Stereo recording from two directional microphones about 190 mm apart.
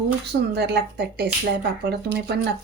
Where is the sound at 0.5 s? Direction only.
60° right (ahead or behind).